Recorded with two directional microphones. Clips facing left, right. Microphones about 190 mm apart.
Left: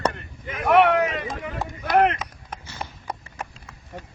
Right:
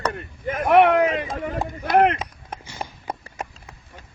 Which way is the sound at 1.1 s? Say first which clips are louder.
Right 4 dB; 40° right (ahead or behind).